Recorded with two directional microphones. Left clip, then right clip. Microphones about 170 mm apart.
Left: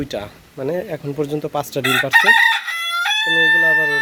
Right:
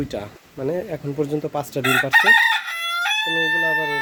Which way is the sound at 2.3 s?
65° right (ahead or behind).